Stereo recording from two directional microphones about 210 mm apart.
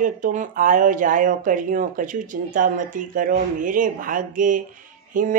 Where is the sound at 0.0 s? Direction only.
40° right (ahead or behind).